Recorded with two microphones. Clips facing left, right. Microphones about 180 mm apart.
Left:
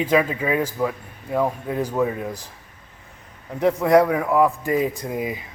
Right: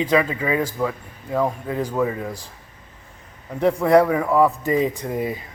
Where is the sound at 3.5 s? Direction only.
5° left (ahead or behind).